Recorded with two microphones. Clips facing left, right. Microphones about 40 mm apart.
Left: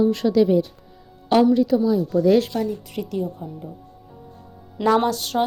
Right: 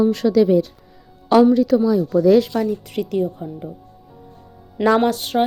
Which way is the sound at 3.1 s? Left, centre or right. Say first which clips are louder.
Right 5 dB; right.